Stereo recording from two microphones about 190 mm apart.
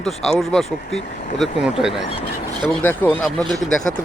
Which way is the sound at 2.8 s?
10° left (ahead or behind).